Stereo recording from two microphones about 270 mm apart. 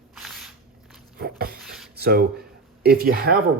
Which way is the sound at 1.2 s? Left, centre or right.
Right.